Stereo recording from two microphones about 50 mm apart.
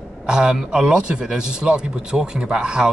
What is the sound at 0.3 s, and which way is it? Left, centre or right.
Speech, centre.